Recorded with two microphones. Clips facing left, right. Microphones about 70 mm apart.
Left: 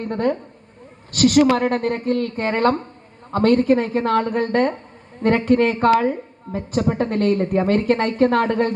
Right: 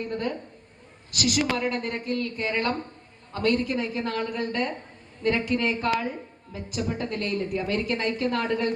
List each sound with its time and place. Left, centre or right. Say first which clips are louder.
0.0 s a woman's voice: left 8 dB; left